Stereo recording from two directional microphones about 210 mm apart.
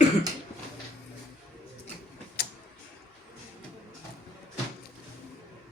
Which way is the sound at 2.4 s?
50° left (ahead or behind).